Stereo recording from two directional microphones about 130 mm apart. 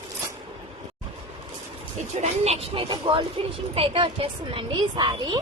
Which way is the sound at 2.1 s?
60° right (ahead or behind).